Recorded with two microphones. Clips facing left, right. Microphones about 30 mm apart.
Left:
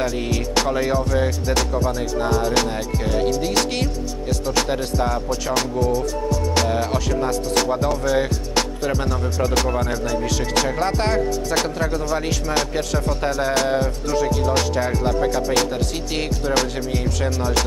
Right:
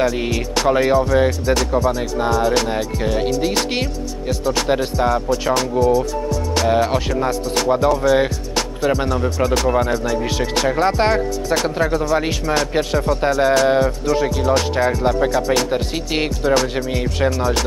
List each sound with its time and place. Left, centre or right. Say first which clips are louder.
0.0 s speech: right 4 dB; centre
7.9 s speech: right 4 dB; centre